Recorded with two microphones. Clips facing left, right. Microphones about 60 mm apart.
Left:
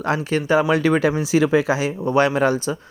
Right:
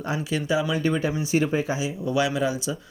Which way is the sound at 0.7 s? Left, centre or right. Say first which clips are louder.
Left 7 dB; left.